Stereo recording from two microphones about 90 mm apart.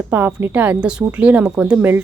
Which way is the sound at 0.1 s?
15° right (ahead or behind).